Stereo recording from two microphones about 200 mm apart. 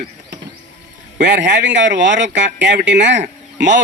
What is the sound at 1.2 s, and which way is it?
Speech, 60° right (ahead or behind).